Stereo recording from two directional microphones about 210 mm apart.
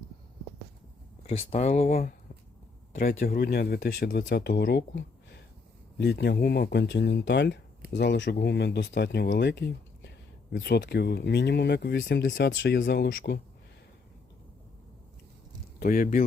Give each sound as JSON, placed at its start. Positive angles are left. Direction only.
{"t": 1.3, "sound": "speech", "side_deg": 30}
{"t": 3.0, "sound": "speech", "side_deg": 45}
{"t": 15.8, "sound": "speech", "side_deg": 40}